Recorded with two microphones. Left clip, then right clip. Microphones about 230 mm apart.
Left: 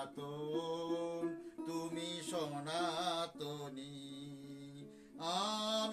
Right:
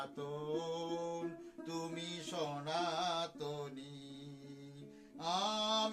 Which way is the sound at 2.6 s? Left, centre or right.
Centre.